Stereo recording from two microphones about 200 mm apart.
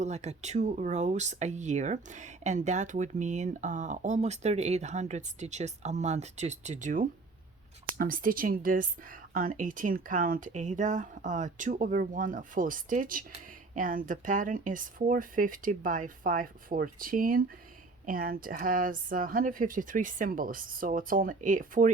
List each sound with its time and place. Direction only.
0.0 s speech: 35° right (ahead or behind)